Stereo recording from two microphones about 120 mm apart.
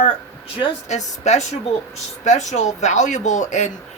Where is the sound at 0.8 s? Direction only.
75° left (ahead or behind).